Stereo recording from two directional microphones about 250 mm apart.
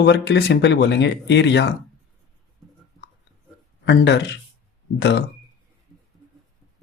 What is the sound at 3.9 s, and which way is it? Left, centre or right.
Speech, left.